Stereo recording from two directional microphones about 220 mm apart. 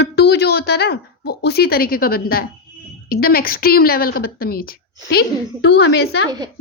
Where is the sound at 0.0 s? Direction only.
50° left (ahead or behind).